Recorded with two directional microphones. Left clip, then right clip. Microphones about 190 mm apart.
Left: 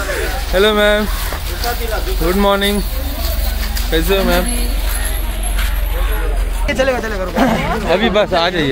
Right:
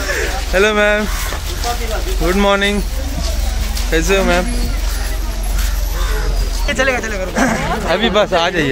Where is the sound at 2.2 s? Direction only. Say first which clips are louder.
Even; centre (ahead or behind).